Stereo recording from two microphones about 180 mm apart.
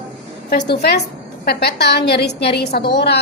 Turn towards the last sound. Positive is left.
turn(degrees=65)  # may be behind; listen again after turning